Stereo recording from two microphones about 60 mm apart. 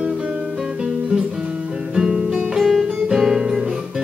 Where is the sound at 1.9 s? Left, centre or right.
Centre.